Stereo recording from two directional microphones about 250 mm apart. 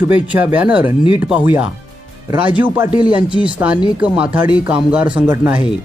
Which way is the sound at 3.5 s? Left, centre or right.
Centre.